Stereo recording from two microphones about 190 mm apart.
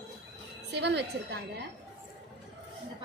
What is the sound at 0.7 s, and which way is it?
Speech, 65° right (ahead or behind).